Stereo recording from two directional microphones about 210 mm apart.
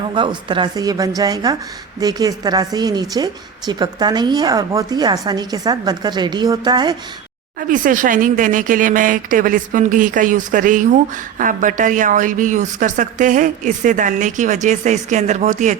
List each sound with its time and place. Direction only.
0.1 s a woman's voice: 25° right (ahead or behind)
7.7 s a woman's voice: 40° right (ahead or behind)